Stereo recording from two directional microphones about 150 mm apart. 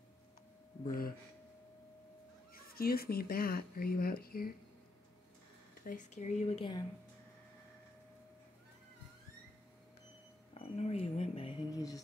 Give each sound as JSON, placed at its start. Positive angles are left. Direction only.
{"t": 0.8, "sound": "speech", "side_deg": 75}
{"t": 2.5, "sound": "speech", "side_deg": 80}
{"t": 5.9, "sound": "speech", "side_deg": 55}
{"t": 10.5, "sound": "a sound", "side_deg": 45}
{"t": 11.7, "sound": "music", "side_deg": 20}